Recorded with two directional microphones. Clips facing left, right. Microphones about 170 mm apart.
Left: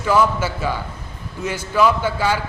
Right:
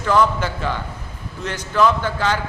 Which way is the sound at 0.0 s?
10° left (ahead or behind).